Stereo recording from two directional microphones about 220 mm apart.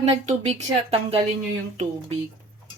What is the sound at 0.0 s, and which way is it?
A woman's voice, 30° right (ahead or behind).